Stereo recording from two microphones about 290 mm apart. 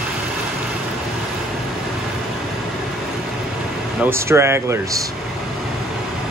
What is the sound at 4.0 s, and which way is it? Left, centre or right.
Speech, centre.